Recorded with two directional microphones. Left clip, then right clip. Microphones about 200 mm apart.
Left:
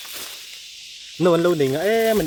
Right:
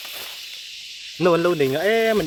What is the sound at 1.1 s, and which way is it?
Speech, 30° left (ahead or behind).